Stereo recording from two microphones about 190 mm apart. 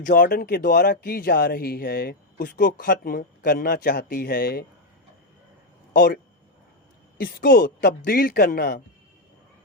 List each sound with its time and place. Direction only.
0.0 s speech: 45° left (ahead or behind)
5.9 s speech: 50° left (ahead or behind)
7.2 s speech: 50° left (ahead or behind)